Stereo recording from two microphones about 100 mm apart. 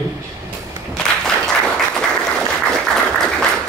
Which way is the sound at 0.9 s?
5° left (ahead or behind).